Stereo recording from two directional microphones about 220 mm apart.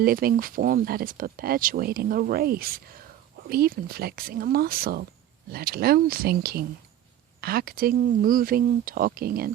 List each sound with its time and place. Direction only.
0.0 s speech: 45° right (ahead or behind)